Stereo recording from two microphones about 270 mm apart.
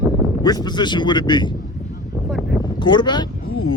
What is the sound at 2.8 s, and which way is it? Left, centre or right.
Speech, centre.